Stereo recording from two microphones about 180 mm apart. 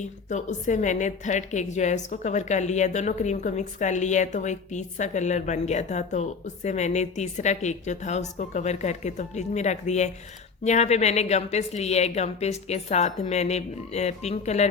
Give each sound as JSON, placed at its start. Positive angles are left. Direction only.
{"t": 0.0, "sound": "a woman's voice", "side_deg": 40}